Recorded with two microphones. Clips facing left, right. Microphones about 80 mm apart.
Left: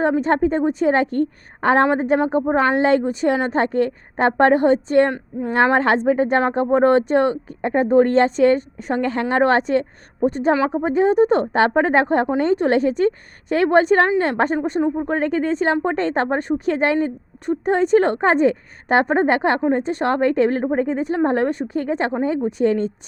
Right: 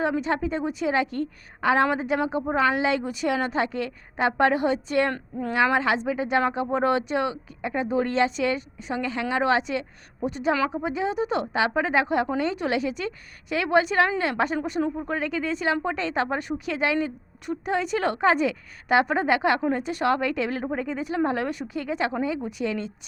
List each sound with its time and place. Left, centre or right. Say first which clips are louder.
0.0 s speech: left 7 dB; left